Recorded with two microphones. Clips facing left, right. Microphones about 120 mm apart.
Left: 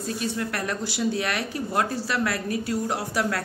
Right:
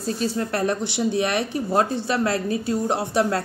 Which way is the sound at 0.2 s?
30° right (ahead or behind).